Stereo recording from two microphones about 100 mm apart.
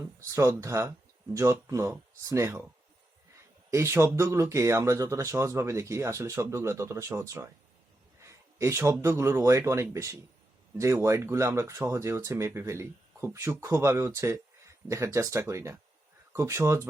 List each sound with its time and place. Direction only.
0.3 s speech: 30° right (ahead or behind)
3.7 s speech: 25° right (ahead or behind)